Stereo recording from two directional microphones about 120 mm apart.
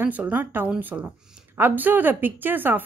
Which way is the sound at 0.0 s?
15° right (ahead or behind).